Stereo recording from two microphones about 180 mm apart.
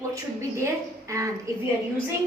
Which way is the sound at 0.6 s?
15° right (ahead or behind).